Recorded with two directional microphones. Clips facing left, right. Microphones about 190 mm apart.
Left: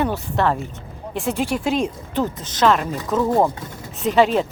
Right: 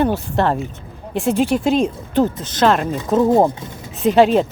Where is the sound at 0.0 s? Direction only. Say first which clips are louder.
Right 3 dB; 30° right (ahead or behind).